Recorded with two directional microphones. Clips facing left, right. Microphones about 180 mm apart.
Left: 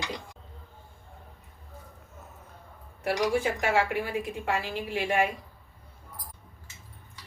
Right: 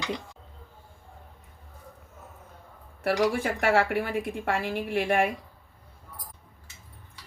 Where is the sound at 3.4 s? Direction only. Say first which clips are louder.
Right 2 dB; 60° right (ahead or behind).